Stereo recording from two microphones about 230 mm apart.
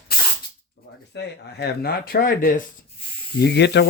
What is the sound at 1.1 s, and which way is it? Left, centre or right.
Speech, left.